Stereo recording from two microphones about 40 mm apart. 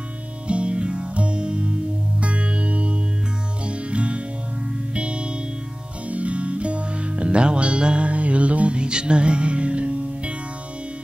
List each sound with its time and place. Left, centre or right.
0.5 s music: right